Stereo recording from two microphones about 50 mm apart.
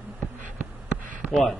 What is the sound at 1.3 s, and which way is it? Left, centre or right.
Speech, centre.